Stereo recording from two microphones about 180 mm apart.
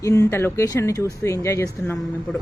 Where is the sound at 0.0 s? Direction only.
15° left (ahead or behind).